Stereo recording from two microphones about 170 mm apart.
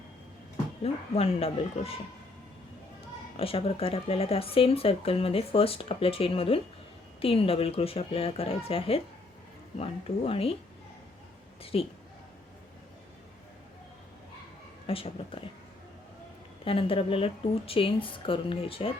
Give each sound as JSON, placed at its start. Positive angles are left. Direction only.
{"t": 0.8, "sound": "speech", "side_deg": 35}
{"t": 3.3, "sound": "speech", "side_deg": 35}
{"t": 11.6, "sound": "speech", "side_deg": 35}
{"t": 14.8, "sound": "speech", "side_deg": 35}
{"t": 16.6, "sound": "speech", "side_deg": 30}